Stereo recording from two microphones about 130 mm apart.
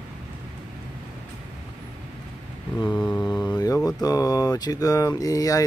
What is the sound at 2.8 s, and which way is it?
Mantra, 35° left (ahead or behind).